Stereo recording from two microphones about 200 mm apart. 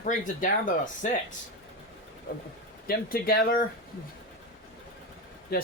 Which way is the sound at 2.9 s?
45° left (ahead or behind).